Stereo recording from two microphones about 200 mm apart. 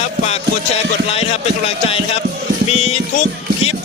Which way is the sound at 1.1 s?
30° left (ahead or behind).